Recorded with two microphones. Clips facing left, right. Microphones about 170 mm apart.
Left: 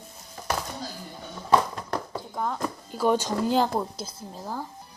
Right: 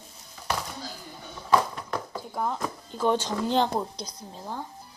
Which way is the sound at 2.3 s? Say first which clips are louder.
Even; 5° right (ahead or behind).